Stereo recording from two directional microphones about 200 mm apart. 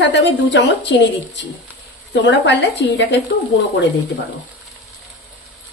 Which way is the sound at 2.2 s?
60° left (ahead or behind).